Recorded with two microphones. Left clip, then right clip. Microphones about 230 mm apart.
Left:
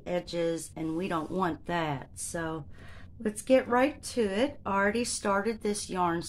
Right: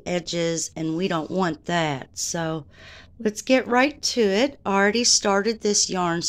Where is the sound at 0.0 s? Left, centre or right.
Right.